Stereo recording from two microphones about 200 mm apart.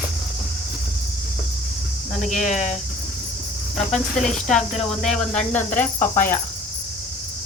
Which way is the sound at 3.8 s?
35° left (ahead or behind).